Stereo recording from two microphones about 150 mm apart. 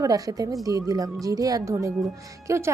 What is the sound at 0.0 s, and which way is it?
A woman's voice, 25° right (ahead or behind).